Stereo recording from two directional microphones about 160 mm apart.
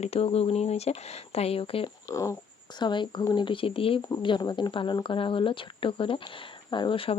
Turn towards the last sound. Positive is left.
turn(degrees=35)  # may be behind; listen again after turning